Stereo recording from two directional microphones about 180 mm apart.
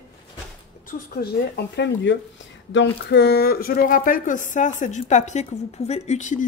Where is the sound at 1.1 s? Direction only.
65° left (ahead or behind).